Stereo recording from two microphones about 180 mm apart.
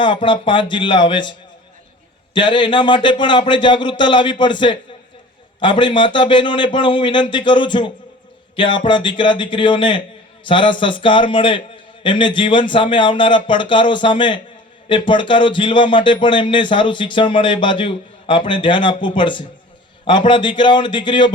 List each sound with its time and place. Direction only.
0.0 s speech: 25° left (ahead or behind)